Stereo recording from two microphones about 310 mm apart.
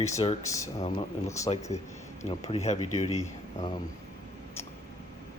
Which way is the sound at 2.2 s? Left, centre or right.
Left.